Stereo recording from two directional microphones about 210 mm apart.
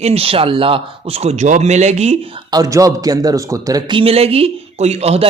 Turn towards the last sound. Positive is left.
turn(degrees=-30)  # may be behind; listen again after turning